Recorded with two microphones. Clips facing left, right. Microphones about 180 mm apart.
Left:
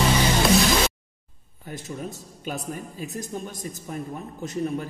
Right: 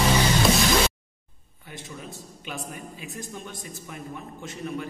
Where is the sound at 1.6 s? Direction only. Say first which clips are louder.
Left 6 dB; 40° left (ahead or behind).